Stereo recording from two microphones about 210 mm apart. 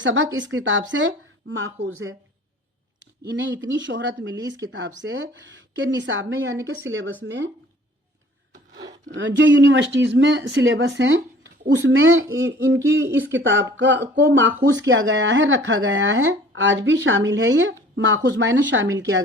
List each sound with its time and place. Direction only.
0.0 s speech: 60° right (ahead or behind)
3.2 s speech: 60° right (ahead or behind)
4.4 s speech: 15° right (ahead or behind)
4.9 s speech: 60° right (ahead or behind)
9.0 s speech: 60° right (ahead or behind)